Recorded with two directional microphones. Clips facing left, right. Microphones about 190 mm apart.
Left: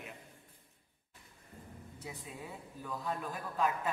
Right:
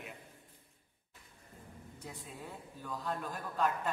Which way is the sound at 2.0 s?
5° left (ahead or behind).